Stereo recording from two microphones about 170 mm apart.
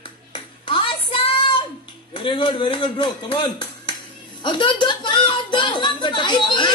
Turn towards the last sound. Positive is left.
turn(degrees=25)  # may be behind; listen again after turning